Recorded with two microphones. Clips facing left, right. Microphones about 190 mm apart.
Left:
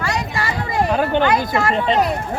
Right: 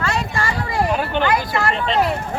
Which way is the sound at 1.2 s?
20° left (ahead or behind).